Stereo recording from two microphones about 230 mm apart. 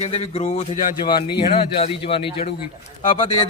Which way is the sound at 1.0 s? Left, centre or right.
Left.